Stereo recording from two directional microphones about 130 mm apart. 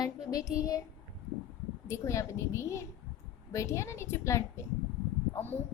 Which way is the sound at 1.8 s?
20° left (ahead or behind).